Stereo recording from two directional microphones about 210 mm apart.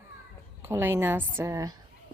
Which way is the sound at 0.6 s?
10° right (ahead or behind).